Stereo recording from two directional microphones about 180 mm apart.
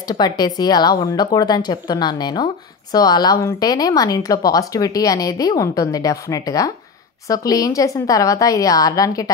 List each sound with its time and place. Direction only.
0.1 s speech: 25° left (ahead or behind)